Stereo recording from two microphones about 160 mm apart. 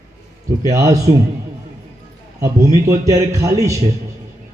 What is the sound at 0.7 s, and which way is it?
Speech, 20° right (ahead or behind).